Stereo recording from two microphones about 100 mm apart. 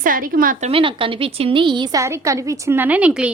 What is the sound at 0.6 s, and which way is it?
A woman's voice, 65° right (ahead or behind).